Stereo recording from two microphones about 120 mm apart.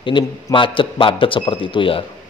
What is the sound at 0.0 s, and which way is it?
A man's voice, 45° left (ahead or behind).